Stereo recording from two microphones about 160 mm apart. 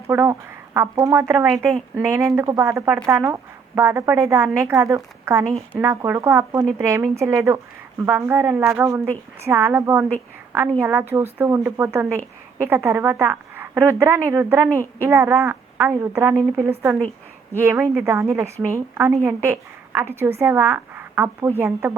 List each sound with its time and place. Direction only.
0.1 s a woman's voice: 15° right (ahead or behind)